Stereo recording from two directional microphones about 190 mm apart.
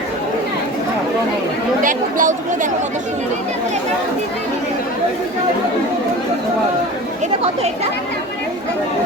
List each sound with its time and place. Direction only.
1.8 s speech: 45° right (ahead or behind)